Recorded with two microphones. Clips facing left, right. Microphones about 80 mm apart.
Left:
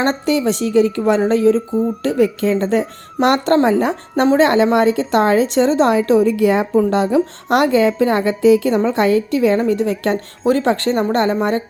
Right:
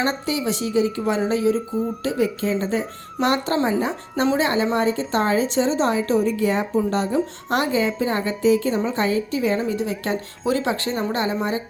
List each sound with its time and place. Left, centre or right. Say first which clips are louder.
0.0 s speech: left 7 dB; left
3.2 s a woman's voice: left 7 dB; left
5.5 s speech: left 6 dB; left
6.1 s a woman's voice: left 6 dB; left
10.4 s speech: left 7 dB; left